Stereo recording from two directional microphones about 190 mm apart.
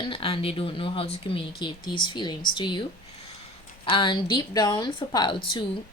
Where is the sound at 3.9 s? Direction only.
25° left (ahead or behind).